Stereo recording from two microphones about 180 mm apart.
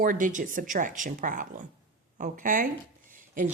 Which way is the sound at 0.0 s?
45° right (ahead or behind).